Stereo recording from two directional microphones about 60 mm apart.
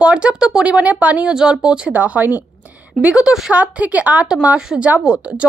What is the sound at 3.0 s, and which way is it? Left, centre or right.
A woman's voice, centre.